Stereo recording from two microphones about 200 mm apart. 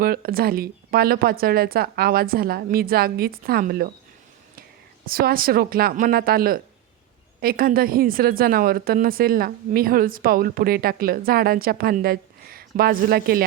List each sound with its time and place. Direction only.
0.0 s a woman's voice: 50° right (ahead or behind)
5.0 s a woman's voice: 45° right (ahead or behind)